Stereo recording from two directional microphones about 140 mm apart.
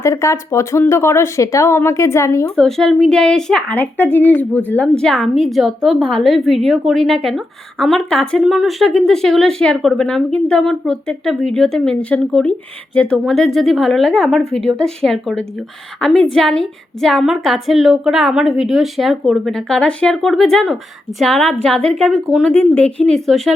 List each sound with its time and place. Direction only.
0.0 s speech: 20° left (ahead or behind)
2.6 s a woman's voice: 5° left (ahead or behind)
22.5 s a woman's voice: 10° left (ahead or behind)